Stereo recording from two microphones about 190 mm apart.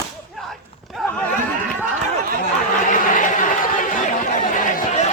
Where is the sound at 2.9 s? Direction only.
40° left (ahead or behind).